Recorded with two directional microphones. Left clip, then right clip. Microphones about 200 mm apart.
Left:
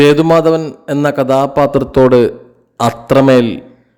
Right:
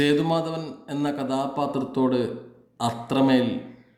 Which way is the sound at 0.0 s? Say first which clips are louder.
Left 14 dB; 50° left (ahead or behind).